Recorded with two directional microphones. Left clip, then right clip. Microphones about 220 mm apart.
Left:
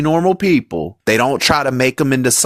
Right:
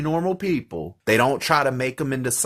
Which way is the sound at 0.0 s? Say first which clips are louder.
Left 9 dB; 45° left (ahead or behind).